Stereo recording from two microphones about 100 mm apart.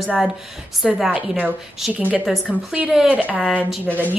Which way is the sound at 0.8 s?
5° right (ahead or behind).